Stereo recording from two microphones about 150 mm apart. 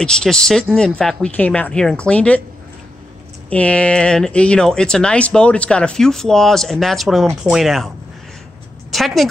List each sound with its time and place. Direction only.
0.0 s speech: 5° left (ahead or behind)
3.4 s speech: 10° left (ahead or behind)
8.9 s speech: centre (ahead or behind)